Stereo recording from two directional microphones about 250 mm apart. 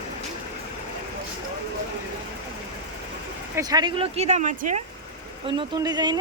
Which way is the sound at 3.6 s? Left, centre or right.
Centre.